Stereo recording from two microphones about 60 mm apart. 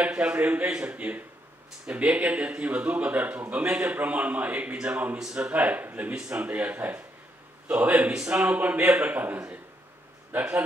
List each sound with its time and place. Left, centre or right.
0.0 s speech: right
8.1 s speech: centre